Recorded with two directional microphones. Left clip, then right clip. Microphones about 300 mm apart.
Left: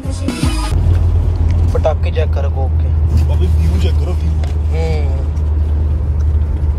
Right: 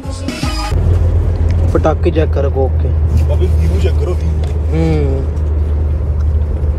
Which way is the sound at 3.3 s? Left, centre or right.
Centre.